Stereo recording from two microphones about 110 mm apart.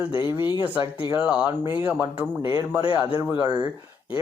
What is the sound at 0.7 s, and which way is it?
Speech, 15° right (ahead or behind).